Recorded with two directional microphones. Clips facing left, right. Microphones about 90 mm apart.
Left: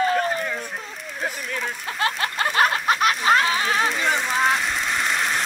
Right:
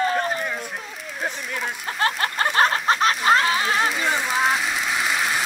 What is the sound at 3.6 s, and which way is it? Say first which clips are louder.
Fire: even; centre (ahead or behind).